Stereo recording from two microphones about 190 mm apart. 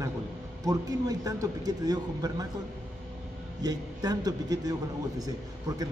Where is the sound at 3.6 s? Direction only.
20° right (ahead or behind).